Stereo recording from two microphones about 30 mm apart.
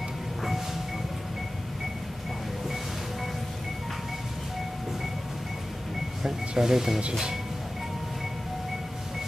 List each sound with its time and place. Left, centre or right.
6.5 s speech: centre